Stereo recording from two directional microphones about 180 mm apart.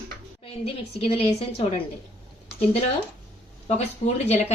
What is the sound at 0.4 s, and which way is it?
A woman's voice, 35° left (ahead or behind).